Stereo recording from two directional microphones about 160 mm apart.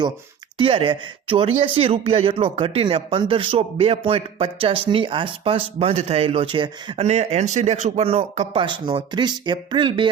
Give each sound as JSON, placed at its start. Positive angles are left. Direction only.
{"t": 0.6, "sound": "speech", "side_deg": -30}